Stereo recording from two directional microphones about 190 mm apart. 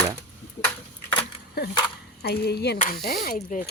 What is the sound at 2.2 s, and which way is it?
Speech, 55° left (ahead or behind).